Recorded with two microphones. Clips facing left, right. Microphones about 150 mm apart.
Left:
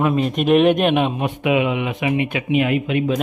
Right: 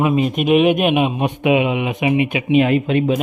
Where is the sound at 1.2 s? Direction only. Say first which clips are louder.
Right 2 dB; 20° right (ahead or behind).